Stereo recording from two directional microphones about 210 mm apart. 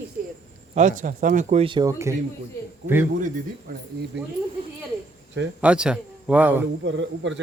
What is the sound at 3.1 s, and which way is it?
Speech, 40° right (ahead or behind).